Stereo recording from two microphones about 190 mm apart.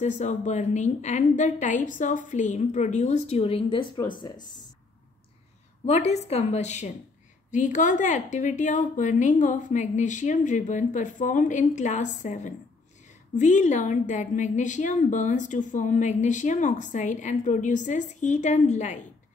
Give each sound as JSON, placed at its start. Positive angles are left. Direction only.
{"t": 0.0, "sound": "a woman's voice", "side_deg": 40}
{"t": 5.9, "sound": "a woman's voice", "side_deg": 35}